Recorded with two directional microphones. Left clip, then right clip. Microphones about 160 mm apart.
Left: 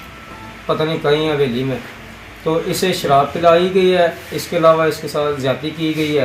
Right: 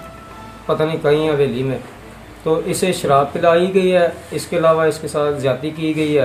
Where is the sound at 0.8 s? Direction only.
30° right (ahead or behind).